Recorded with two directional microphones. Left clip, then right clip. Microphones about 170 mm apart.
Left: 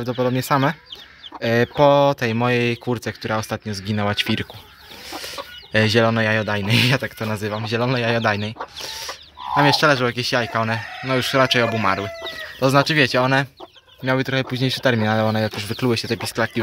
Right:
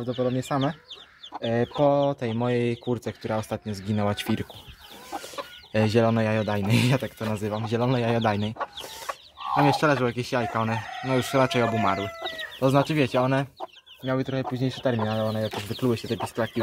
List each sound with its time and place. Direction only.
0.0 s speech: 15° left (ahead or behind); by 4.5 s 5° right (ahead or behind)
5.7 s speech: 5° right (ahead or behind)
9.5 s speech: centre (ahead or behind)
14.0 s speech: 25° left (ahead or behind)
15.7 s speech: 10° left (ahead or behind)